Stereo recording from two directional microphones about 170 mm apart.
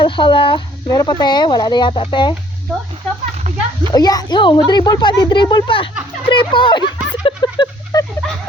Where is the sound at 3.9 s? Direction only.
20° left (ahead or behind).